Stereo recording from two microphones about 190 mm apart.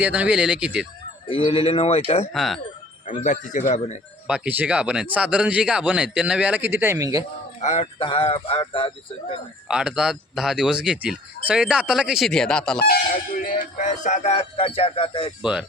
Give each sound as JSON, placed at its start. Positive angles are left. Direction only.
{"t": 0.0, "sound": "speech", "side_deg": -10}
{"t": 1.3, "sound": "music", "side_deg": 30}
{"t": 2.3, "sound": "speech", "side_deg": 0}
{"t": 3.1, "sound": "music", "side_deg": 40}
{"t": 4.3, "sound": "speech", "side_deg": -5}
{"t": 7.6, "sound": "music", "side_deg": 35}
{"t": 9.6, "sound": "speech", "side_deg": -5}
{"t": 12.8, "sound": "music", "side_deg": 50}
{"t": 15.4, "sound": "speech", "side_deg": -5}